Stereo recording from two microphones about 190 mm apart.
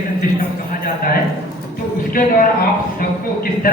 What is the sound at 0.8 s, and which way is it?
Speech, 50° left (ahead or behind).